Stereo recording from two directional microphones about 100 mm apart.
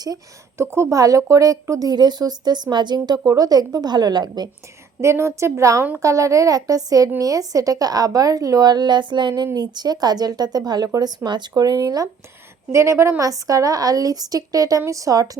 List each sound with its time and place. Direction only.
0.6 s speech: 25° right (ahead or behind); by 4.4 s 45° right (ahead or behind)
4.9 s a woman's voice: 30° right (ahead or behind)